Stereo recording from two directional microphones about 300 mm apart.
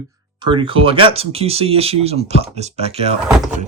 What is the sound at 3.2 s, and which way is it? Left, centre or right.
Speech, centre.